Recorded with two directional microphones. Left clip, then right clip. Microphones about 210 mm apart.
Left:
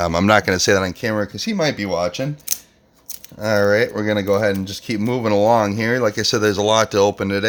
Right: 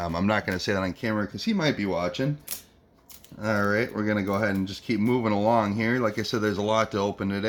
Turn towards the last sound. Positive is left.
turn(degrees=50)  # may be behind; listen again after turning